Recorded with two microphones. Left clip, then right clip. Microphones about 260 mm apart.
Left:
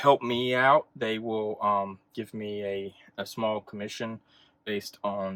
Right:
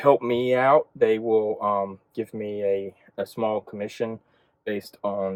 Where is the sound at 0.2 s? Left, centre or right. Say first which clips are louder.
Right 4 dB; centre.